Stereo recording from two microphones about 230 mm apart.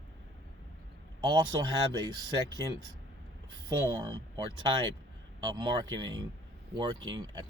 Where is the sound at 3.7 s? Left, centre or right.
Centre.